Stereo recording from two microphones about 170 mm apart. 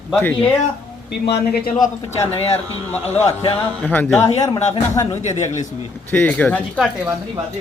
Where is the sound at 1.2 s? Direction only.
80° left.